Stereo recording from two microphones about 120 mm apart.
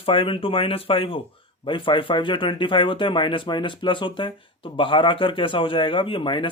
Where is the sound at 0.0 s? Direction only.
45° left (ahead or behind).